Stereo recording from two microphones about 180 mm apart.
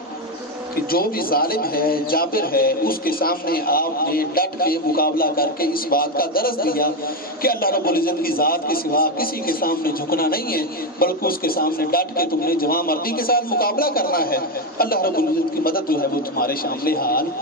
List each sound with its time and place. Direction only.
0.9 s a man's voice: 55° left (ahead or behind)